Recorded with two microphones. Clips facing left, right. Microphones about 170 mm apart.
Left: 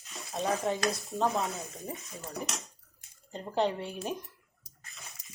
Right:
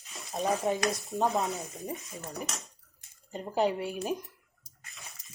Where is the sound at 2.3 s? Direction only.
Centre (ahead or behind).